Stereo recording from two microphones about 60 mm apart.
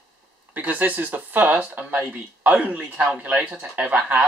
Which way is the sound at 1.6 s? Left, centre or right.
Centre.